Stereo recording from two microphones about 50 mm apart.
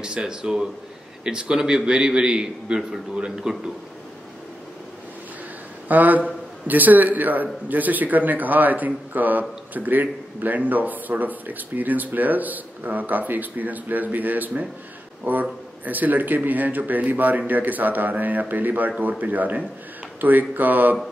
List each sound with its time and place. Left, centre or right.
0.3 s a man's voice: centre
5.9 s speech: right